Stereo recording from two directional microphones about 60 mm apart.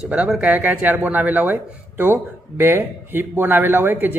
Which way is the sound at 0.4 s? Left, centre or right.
Right.